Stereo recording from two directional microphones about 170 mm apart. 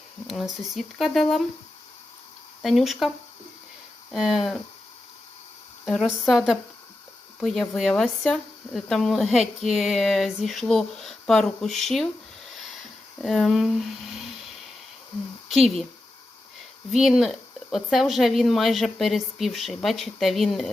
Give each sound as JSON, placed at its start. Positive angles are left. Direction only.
{"t": 0.7, "sound": "speech", "side_deg": 0}
{"t": 2.6, "sound": "speech", "side_deg": 0}
{"t": 4.1, "sound": "speech", "side_deg": 0}
{"t": 5.8, "sound": "speech", "side_deg": 5}
{"t": 12.5, "sound": "a sound", "side_deg": 0}
{"t": 13.2, "sound": "speech", "side_deg": 0}
{"t": 16.9, "sound": "speech", "side_deg": 0}